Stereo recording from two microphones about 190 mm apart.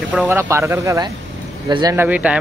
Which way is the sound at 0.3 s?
15° right (ahead or behind).